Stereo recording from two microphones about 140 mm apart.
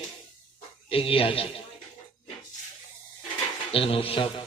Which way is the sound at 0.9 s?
40° left (ahead or behind).